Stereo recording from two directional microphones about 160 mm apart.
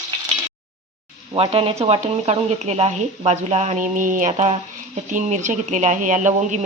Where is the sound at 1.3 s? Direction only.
35° right (ahead or behind).